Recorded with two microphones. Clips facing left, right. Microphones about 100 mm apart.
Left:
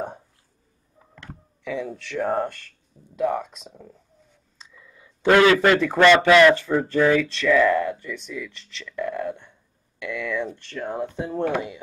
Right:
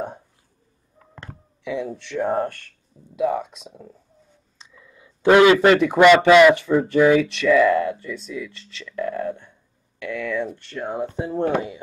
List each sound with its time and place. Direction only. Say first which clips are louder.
1.7 s speech: right 2 dB; 15° right (ahead or behind)
2.0 s speech: right 1 dB; centre (ahead or behind)
4.6 s a sound: right 3 dB; 15° right (ahead or behind)
6.1 s speech: right 2 dB; 20° right (ahead or behind)
11.4 s speech: right 3 dB; 45° right (ahead or behind)